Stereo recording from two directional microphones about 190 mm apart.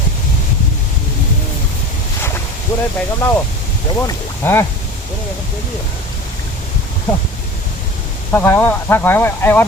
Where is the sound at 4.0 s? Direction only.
15° left (ahead or behind).